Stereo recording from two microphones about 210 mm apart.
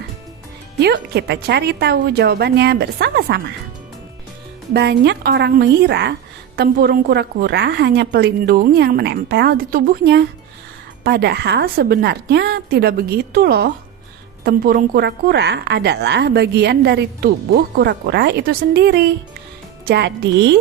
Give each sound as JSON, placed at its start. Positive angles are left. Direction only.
{"t": 0.8, "sound": "a woman's voice", "side_deg": -50}
{"t": 4.7, "sound": "a woman's voice", "side_deg": -50}